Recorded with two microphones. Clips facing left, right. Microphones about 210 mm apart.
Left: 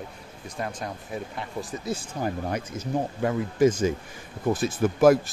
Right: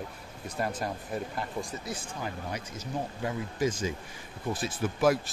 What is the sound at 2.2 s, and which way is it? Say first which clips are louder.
Speech: left 9 dB; 55° left (ahead or behind).